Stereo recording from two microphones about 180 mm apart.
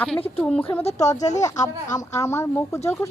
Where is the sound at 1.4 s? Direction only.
20° left (ahead or behind).